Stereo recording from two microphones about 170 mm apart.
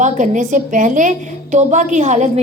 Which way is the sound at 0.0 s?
45° right (ahead or behind).